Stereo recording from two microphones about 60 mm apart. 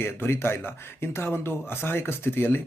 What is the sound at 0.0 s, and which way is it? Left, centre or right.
Speech, left.